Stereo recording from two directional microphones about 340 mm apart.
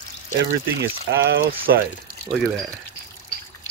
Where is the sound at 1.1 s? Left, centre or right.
Right.